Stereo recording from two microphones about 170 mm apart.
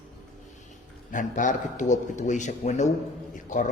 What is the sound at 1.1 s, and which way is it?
A man's voice, 50° left (ahead or behind).